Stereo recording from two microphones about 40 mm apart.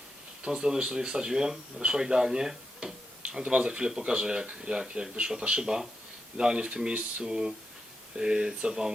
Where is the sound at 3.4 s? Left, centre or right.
Right.